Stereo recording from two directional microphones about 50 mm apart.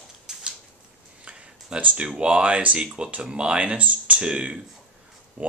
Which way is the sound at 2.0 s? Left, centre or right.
Right.